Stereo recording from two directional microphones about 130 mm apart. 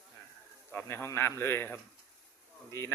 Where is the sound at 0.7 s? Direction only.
20° left (ahead or behind).